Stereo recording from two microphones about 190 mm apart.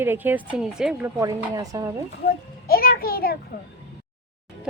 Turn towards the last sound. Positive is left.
turn(degrees=50)  # may be behind; listen again after turning